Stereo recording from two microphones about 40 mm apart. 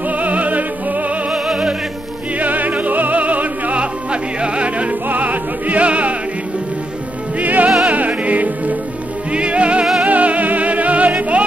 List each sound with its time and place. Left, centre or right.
0.1 s music: right
1.3 s music: centre
2.3 s music: right
3.8 s music: right
5.0 s music: right
7.3 s music: right
9.3 s music: right